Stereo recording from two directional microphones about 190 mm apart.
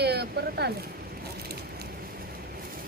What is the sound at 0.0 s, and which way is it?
Speech, 60° right (ahead or behind).